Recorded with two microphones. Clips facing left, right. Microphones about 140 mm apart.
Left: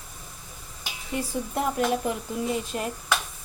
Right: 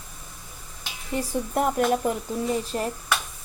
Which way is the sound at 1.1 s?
40° right (ahead or behind).